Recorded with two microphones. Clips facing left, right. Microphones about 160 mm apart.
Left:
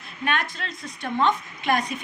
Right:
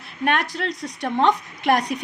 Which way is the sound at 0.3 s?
70° right (ahead or behind).